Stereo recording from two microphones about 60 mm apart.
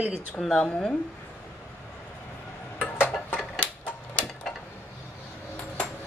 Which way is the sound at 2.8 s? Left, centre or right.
Left.